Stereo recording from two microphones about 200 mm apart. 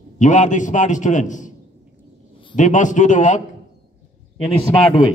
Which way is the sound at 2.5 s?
40° left (ahead or behind).